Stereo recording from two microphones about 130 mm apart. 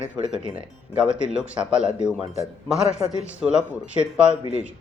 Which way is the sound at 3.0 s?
30° right (ahead or behind).